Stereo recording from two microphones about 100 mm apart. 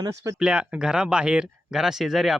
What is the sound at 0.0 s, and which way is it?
Speech, 35° right (ahead or behind).